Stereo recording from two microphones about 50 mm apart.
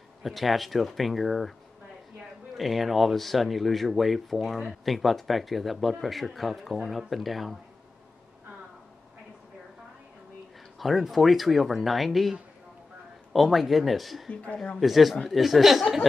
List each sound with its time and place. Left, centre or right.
0.2 s speech: centre
2.5 s speech: centre
10.8 s speech: centre
14.3 s speech: left
14.8 s speech: centre